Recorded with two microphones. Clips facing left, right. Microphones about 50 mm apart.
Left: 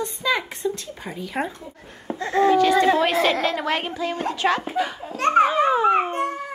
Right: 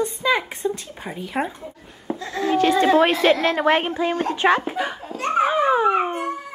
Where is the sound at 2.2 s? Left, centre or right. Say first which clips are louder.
Left 8 dB; left.